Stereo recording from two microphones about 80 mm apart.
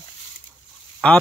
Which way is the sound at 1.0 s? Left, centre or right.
Centre.